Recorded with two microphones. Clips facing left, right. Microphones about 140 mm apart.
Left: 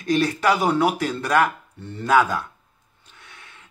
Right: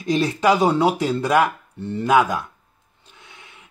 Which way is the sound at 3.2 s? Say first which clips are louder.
Right 1 dB; 20° right (ahead or behind).